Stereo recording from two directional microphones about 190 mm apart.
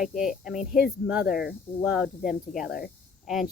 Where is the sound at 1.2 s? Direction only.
55° left (ahead or behind).